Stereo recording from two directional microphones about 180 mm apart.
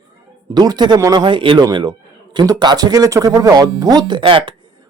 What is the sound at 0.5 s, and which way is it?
A man's voice, 20° right (ahead or behind).